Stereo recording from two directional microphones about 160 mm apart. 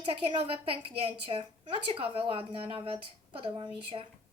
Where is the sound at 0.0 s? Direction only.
30° right (ahead or behind).